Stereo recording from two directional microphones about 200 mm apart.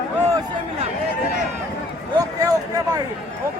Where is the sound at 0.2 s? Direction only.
15° right (ahead or behind).